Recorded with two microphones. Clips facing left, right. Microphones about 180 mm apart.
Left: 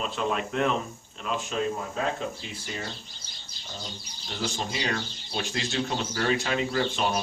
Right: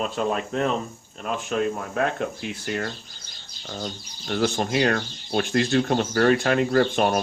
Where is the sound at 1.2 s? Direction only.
55° right (ahead or behind).